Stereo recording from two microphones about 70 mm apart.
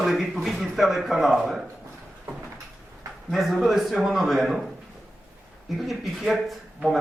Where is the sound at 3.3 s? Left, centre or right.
Centre.